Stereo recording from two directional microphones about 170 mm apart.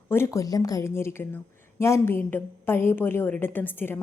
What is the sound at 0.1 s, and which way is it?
A woman's voice, 15° left (ahead or behind).